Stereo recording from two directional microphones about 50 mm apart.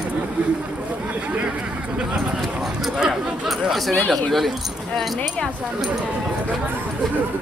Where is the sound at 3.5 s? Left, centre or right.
Centre.